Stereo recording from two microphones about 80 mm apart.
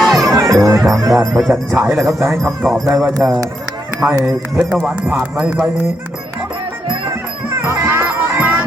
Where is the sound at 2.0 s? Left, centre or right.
Centre.